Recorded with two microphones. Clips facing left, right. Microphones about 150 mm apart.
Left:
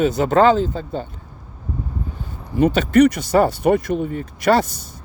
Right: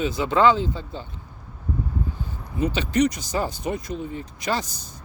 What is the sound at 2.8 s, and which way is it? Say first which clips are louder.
Speech: left 8 dB; 60° left (ahead or behind).